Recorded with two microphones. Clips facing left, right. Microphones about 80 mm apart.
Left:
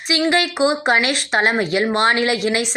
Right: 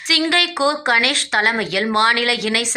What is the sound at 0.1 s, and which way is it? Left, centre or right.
A woman's voice, left.